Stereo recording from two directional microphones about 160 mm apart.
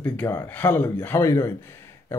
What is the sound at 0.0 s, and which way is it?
Speech, 10° left (ahead or behind).